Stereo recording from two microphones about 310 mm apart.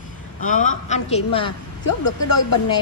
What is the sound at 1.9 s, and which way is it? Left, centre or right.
Speech, left.